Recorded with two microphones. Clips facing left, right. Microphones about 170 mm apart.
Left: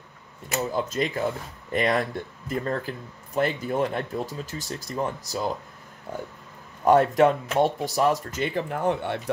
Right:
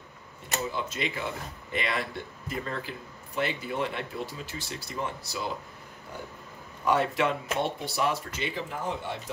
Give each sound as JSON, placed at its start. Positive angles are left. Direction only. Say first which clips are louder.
{"t": 0.6, "sound": "speech", "louder": "left 6 dB", "side_deg": 40}
{"t": 6.8, "sound": "speech", "louder": "left 8 dB", "side_deg": 45}